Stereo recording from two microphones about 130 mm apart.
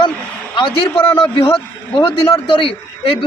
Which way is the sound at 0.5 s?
40° left (ahead or behind).